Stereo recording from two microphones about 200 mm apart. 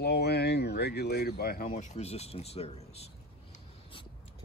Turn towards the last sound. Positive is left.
turn(degrees=30)  # may be behind; listen again after turning